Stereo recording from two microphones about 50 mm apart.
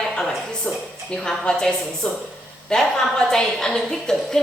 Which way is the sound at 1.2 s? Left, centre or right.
Centre.